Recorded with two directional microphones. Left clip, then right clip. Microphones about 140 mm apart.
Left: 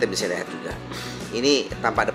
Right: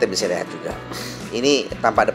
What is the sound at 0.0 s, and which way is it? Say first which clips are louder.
Speech: right 4 dB; 10° right (ahead or behind).